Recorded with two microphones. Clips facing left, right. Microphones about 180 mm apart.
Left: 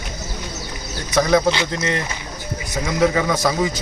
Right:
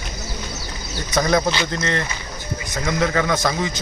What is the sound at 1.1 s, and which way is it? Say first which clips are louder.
Speech: left 3 dB; centre (ahead or behind).